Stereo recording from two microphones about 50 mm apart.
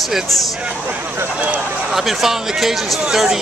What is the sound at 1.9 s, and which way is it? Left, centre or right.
Speech, centre.